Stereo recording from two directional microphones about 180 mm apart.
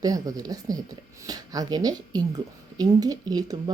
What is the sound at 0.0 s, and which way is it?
Speech, 20° right (ahead or behind).